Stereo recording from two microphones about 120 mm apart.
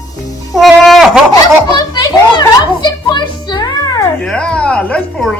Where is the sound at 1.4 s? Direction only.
30° left (ahead or behind).